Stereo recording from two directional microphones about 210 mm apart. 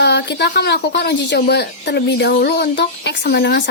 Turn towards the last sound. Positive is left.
turn(degrees=50)  # may be behind; listen again after turning